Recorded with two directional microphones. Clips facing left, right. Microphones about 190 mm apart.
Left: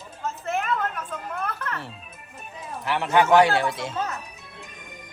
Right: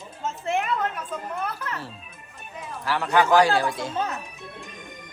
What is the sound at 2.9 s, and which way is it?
Speech, 20° left (ahead or behind).